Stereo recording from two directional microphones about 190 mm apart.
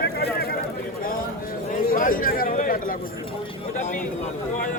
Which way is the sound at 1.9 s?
45° left (ahead or behind).